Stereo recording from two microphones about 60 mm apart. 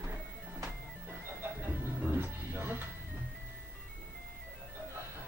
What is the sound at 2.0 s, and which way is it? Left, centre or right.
Music, right.